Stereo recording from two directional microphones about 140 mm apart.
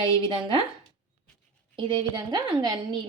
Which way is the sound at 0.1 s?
35° right (ahead or behind).